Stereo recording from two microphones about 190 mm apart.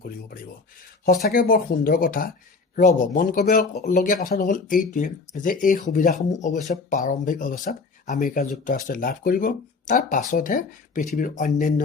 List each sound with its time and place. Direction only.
1.3 s speech: 50° left (ahead or behind)